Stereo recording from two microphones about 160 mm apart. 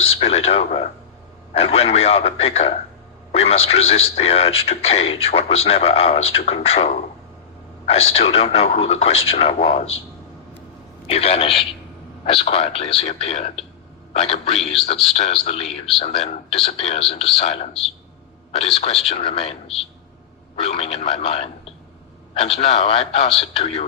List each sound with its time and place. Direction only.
0.0 s speech: 40° left (ahead or behind)
11.0 s a man's voice: 40° left (ahead or behind)